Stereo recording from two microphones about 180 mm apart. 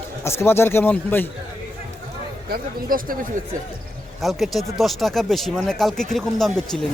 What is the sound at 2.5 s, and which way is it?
Speech, 50° right (ahead or behind).